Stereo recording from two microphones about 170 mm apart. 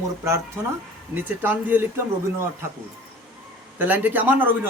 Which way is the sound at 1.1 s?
10° right (ahead or behind).